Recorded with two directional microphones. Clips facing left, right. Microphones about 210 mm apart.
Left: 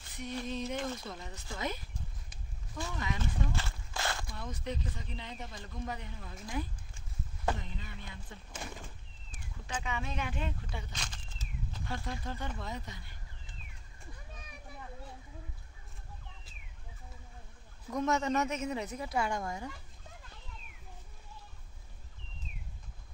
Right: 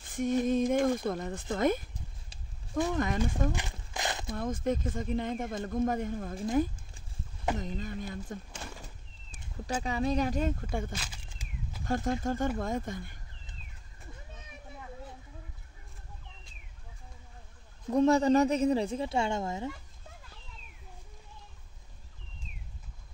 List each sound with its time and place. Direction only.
0.1 s speech: 50° right (ahead or behind)
2.9 s speech: 50° right (ahead or behind)
3.5 s walk: 15° right (ahead or behind)
4.4 s speech: 50° right (ahead or behind)
8.6 s speech: 15° left (ahead or behind)
9.8 s a woman's voice: 35° right (ahead or behind)
11.0 s a sound: 10° right (ahead or behind)
11.8 s speech: 45° right (ahead or behind)
17.8 s a woman's voice: 30° right (ahead or behind)